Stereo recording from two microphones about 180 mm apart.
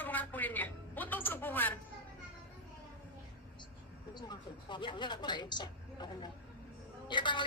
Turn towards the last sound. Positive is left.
turn(degrees=25)  # may be behind; listen again after turning